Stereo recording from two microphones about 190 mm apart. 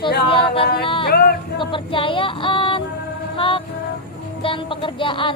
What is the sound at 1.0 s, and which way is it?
Music, 55° left (ahead or behind).